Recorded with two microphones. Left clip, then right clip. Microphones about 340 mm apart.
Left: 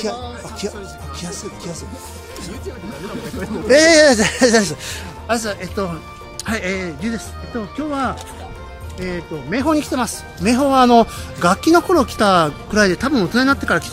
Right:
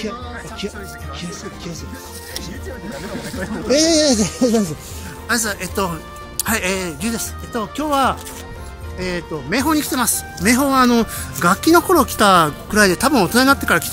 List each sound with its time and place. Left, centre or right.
3.6 s speech: left
5.3 s speech: centre